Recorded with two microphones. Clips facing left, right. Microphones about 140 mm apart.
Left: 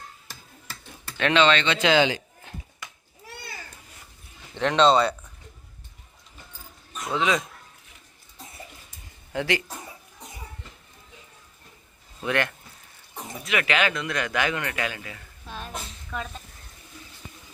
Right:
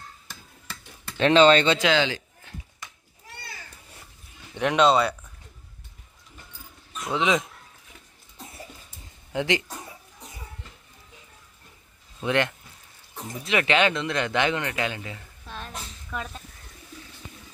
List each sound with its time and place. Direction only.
1.2 s speech: 35° right (ahead or behind)
1.9 s a sound: 15° left (ahead or behind)
4.5 s speech: 10° right (ahead or behind)
7.1 s speech: 20° right (ahead or behind)
9.3 s speech: 20° right (ahead or behind)
12.2 s speech: 20° right (ahead or behind)
15.4 s a sound: 5° left (ahead or behind)